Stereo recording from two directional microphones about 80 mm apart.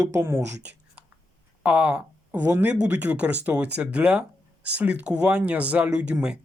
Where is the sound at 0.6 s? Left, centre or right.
Centre.